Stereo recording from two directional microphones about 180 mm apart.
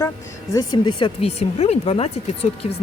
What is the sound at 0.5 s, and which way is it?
Speech, 25° left (ahead or behind).